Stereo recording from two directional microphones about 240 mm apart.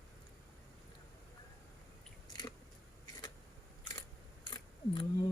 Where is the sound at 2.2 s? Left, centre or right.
Centre.